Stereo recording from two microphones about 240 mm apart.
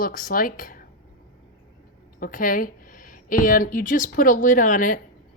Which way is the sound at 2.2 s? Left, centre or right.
Left.